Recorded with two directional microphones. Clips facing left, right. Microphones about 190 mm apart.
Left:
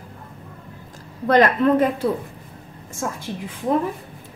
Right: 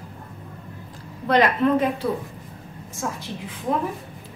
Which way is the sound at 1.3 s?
50° left (ahead or behind).